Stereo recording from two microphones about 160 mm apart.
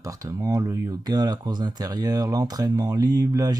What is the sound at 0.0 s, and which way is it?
Speech, 20° right (ahead or behind).